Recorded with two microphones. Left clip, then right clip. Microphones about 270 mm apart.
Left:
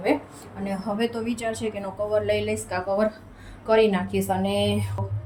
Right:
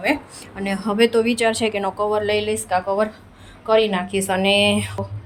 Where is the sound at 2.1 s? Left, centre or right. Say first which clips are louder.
Right 3 dB; centre.